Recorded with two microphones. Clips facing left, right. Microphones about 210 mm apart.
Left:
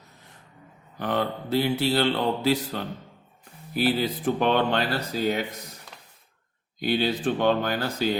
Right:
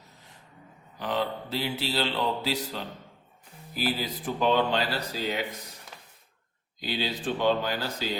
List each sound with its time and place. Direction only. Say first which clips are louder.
0.9 s mantra: left 3 dB; 55° left (ahead or behind)
6.7 s mantra: left 7 dB; 55° left (ahead or behind)